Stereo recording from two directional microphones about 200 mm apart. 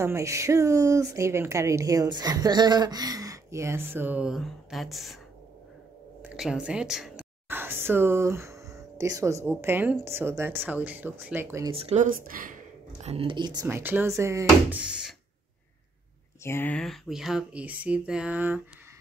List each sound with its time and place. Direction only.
0.0 s a woman's voice: 15° right (ahead or behind)
6.3 s speech: 5° right (ahead or behind)
11.7 s speech: 30° right (ahead or behind)
13.0 s a woman's voice: 30° right (ahead or behind); by 15.1 s 5° right (ahead or behind)
16.4 s speech: 10° left (ahead or behind); by 18.6 s 10° right (ahead or behind)